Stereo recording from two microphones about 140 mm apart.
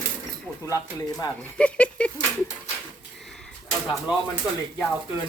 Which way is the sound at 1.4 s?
10° left (ahead or behind).